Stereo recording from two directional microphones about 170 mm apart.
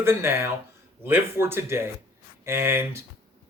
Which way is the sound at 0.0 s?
15° right (ahead or behind).